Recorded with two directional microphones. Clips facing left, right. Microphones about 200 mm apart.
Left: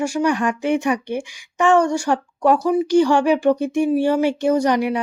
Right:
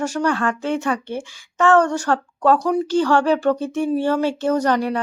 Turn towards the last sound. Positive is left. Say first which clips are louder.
# left 1 dB
turn(degrees=10)  # may be behind; listen again after turning